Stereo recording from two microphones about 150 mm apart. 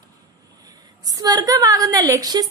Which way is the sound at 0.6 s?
25° right (ahead or behind).